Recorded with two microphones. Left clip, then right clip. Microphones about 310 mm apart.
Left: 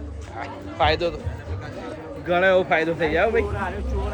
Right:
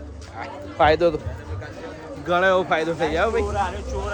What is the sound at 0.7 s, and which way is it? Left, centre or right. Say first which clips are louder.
Speech: right 4 dB; right.